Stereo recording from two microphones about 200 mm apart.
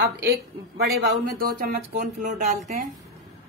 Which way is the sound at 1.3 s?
50° right (ahead or behind).